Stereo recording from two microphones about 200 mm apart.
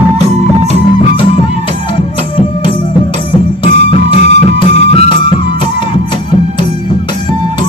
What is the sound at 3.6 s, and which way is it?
Music, 30° left (ahead or behind).